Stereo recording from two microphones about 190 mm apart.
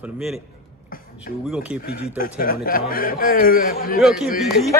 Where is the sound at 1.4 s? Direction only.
5° right (ahead or behind).